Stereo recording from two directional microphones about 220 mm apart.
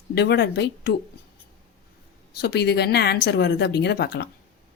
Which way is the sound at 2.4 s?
50° left (ahead or behind).